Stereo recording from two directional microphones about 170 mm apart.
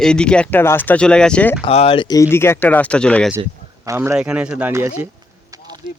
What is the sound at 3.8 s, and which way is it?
Speech, 15° right (ahead or behind).